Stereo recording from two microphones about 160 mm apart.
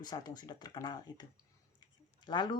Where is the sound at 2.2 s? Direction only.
30° left (ahead or behind).